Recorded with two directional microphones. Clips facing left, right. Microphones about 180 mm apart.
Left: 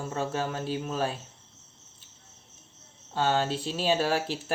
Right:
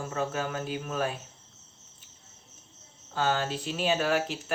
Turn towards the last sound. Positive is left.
turn(degrees=30)  # may be behind; listen again after turning